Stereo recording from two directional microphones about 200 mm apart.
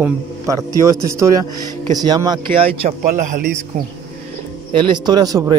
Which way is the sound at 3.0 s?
45° right (ahead or behind).